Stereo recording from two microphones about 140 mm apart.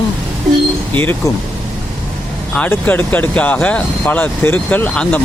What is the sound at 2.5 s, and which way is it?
Speech, 10° left (ahead or behind).